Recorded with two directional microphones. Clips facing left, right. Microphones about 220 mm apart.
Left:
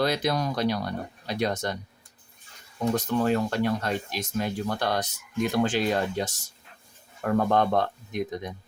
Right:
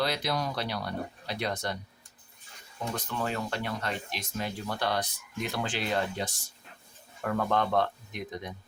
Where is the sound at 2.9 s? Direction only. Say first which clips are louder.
Left 9 dB; 40° left (ahead or behind).